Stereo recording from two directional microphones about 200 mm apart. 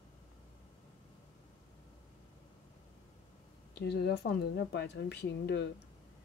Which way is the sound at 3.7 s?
55° left (ahead or behind).